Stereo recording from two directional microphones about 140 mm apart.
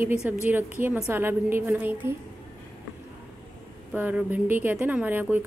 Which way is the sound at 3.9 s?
10° right (ahead or behind).